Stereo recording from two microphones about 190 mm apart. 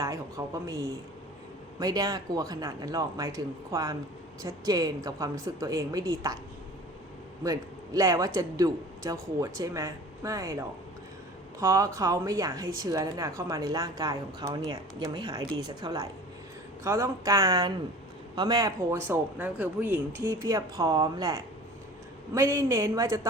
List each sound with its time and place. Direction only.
0.0 s speech: 15° right (ahead or behind)
1.8 s a woman's voice: 20° right (ahead or behind)
7.4 s a man's voice: 20° right (ahead or behind)